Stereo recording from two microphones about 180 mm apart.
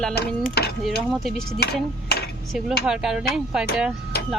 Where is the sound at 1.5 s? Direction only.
65° left (ahead or behind).